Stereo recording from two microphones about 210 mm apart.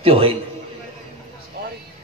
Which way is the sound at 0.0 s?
25° right (ahead or behind).